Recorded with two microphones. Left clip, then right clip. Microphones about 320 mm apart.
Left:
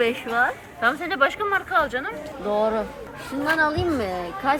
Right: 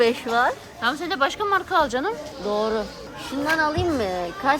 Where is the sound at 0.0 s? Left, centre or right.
Right.